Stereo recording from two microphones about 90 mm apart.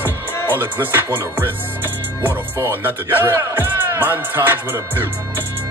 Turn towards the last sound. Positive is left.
turn(degrees=-25)  # may be behind; listen again after turning